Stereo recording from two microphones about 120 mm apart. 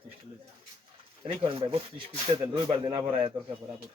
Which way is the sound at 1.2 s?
50° right (ahead or behind).